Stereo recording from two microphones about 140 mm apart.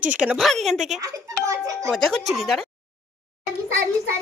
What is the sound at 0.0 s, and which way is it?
Speech, 10° right (ahead or behind).